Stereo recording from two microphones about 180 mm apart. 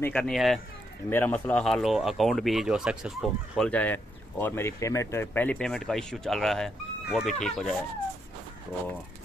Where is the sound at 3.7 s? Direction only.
10° left (ahead or behind).